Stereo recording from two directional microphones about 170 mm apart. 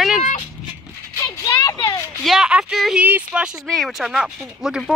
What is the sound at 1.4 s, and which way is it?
Speech, 20° left (ahead or behind).